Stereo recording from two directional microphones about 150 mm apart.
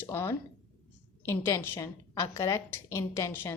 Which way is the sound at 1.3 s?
15° left (ahead or behind).